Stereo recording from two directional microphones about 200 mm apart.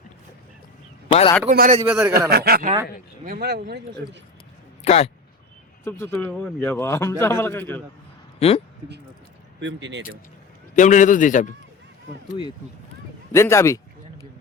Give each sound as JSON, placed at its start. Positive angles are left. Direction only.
{"t": 1.0, "sound": "a sound", "side_deg": 30}
{"t": 1.5, "sound": "a man's voice", "side_deg": -40}
{"t": 1.9, "sound": "a man's voice", "side_deg": -15}
{"t": 2.3, "sound": "speech", "side_deg": -50}
{"t": 4.8, "sound": "speech", "side_deg": 30}
{"t": 5.8, "sound": "a man's voice", "side_deg": 15}
{"t": 8.4, "sound": "speech", "side_deg": 30}
{"t": 9.6, "sound": "speech", "side_deg": -65}
{"t": 10.8, "sound": "a man's voice", "side_deg": 40}
{"t": 13.3, "sound": "a man's voice", "side_deg": 15}